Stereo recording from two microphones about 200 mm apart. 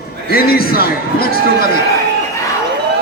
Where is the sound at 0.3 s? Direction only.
50° left (ahead or behind).